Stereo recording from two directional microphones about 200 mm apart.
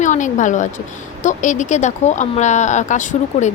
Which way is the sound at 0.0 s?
40° left (ahead or behind).